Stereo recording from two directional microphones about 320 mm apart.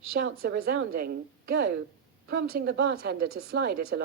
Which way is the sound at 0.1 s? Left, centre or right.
Right.